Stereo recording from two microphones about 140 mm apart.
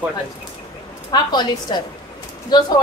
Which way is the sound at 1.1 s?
30° left (ahead or behind).